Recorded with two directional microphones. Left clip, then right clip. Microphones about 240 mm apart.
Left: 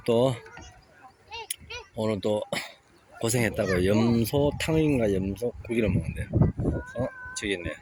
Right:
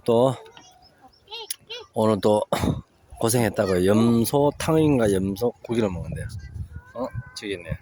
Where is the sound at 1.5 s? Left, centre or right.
Right.